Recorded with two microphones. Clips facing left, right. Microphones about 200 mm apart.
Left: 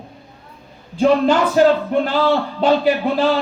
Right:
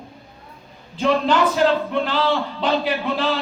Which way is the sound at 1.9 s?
45° left (ahead or behind).